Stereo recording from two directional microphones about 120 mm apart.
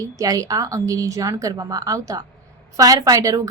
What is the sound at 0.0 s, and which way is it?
A woman's voice, 30° right (ahead or behind).